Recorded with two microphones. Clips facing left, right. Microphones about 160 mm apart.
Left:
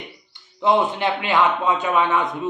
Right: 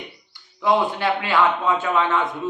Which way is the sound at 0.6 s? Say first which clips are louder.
Left 1 dB; 20° left (ahead or behind).